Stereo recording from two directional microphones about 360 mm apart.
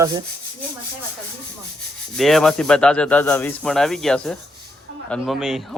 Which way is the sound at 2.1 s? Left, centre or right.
Centre.